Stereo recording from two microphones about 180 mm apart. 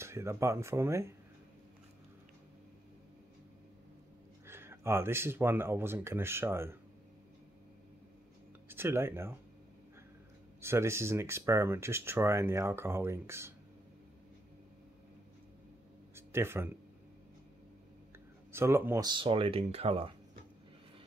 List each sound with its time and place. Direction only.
0.0 s speech: 15° right (ahead or behind)
4.5 s speech: 15° right (ahead or behind)
8.6 s speech: 15° right (ahead or behind)
10.6 s speech: 15° right (ahead or behind)
16.2 s speech: 15° right (ahead or behind)
18.5 s speech: 15° right (ahead or behind)
19.0 s speech: 30° right (ahead or behind)